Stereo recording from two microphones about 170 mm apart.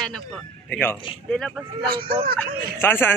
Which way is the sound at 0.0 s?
5° left (ahead or behind).